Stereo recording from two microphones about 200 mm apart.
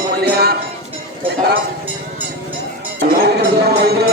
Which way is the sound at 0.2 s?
50° right (ahead or behind).